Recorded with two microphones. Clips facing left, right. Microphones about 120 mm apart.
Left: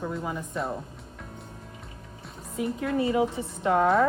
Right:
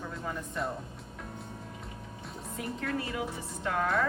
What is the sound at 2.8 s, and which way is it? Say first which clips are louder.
A woman's voice: left 10 dB; 25° left (ahead or behind).